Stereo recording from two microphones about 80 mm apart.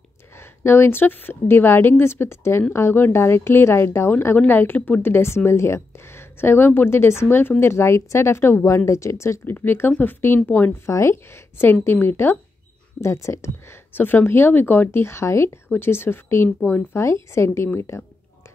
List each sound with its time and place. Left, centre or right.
0.4 s speech: left
9.5 s speech: left